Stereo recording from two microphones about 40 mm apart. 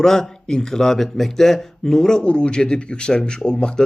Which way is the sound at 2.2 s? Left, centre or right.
Left.